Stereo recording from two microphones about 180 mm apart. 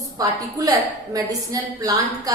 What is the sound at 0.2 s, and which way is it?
A woman's voice, 20° right (ahead or behind).